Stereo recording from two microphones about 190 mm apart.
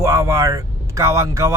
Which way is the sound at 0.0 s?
15° right (ahead or behind).